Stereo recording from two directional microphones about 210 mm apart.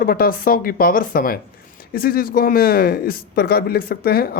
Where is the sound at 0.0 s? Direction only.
45° left (ahead or behind).